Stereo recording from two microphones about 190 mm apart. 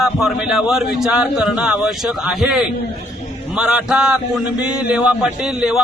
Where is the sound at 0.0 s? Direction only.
Centre (ahead or behind).